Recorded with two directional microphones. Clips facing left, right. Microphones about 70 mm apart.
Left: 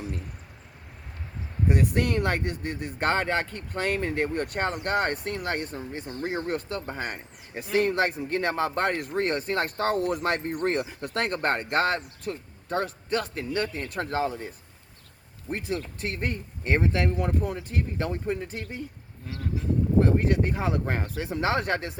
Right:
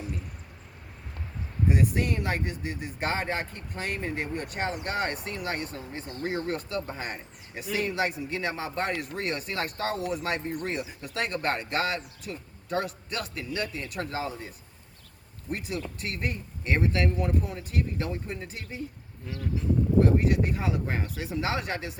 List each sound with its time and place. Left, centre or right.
1.7 s speech: left
6.7 s speech: left
17.2 s speech: left
17.7 s speech: left
20.2 s speech: left